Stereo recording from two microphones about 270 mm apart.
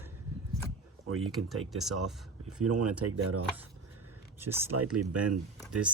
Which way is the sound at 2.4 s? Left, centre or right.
Right.